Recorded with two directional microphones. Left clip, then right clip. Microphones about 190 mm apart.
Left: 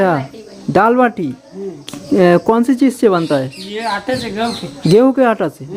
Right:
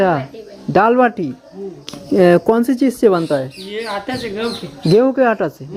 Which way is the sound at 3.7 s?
35° left (ahead or behind).